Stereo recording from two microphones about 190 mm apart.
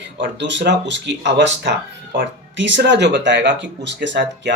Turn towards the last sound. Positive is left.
turn(degrees=-70)  # may be behind; listen again after turning